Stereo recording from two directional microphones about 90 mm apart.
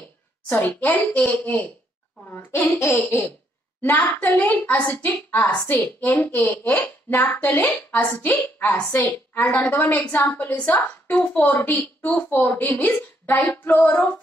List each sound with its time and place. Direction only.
0.5 s a woman's voice: 20° left (ahead or behind)
3.8 s a woman's voice: 20° left (ahead or behind)